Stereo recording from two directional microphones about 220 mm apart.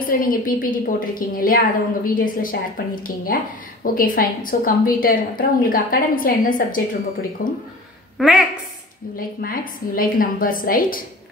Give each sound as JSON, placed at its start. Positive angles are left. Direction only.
{"t": 0.0, "sound": "a woman's voice", "side_deg": 40}
{"t": 8.2, "sound": "a woman's voice", "side_deg": 0}
{"t": 9.1, "sound": "a woman's voice", "side_deg": 40}